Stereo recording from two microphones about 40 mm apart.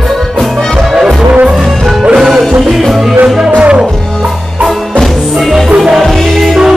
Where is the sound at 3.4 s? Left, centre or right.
Right.